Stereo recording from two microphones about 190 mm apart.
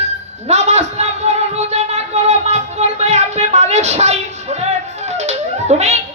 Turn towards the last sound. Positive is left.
turn(degrees=-35)  # may be behind; listen again after turning